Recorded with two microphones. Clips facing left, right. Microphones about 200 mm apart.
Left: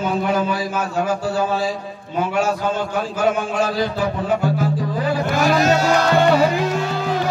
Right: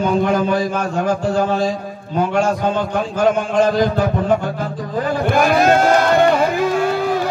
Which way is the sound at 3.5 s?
45° right (ahead or behind).